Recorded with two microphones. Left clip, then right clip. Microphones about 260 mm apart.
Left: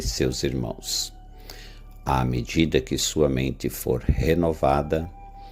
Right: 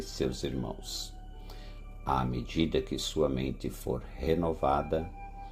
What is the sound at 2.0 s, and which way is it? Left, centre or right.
Speech, left.